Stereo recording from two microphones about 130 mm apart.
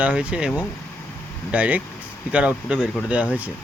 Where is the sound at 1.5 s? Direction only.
10° right (ahead or behind).